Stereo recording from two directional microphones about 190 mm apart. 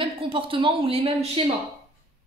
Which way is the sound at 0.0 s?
25° right (ahead or behind).